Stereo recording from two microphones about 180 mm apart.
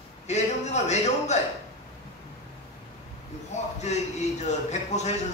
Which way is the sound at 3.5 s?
40° left (ahead or behind).